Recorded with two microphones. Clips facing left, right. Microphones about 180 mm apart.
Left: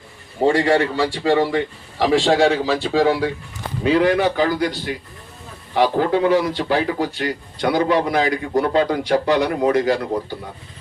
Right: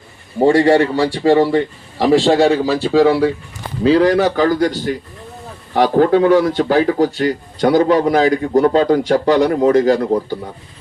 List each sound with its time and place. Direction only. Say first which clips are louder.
0.4 s a man's voice: right 5 dB; 40° right (ahead or behind)